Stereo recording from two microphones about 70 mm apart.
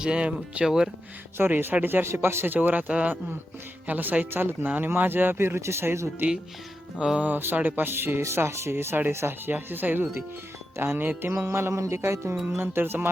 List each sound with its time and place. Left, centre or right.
0.0 s speech: centre
1.4 s speech: right
7.0 s speech: centre
7.3 s speech: right